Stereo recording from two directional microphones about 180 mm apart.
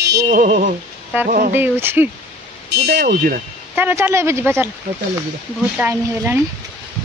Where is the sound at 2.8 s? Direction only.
55° right (ahead or behind).